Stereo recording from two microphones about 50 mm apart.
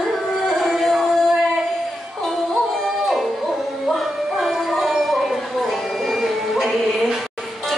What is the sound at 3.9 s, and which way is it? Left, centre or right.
Music, centre.